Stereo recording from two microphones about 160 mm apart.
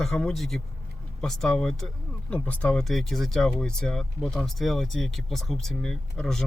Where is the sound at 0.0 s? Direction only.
5° left (ahead or behind).